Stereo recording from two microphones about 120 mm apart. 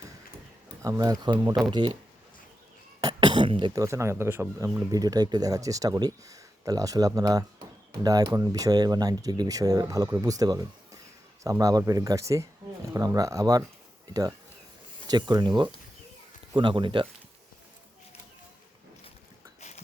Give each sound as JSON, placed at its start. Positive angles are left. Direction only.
{"t": 0.8, "sound": "speech", "side_deg": -30}
{"t": 3.0, "sound": "cough", "side_deg": -35}
{"t": 3.8, "sound": "speech", "side_deg": -25}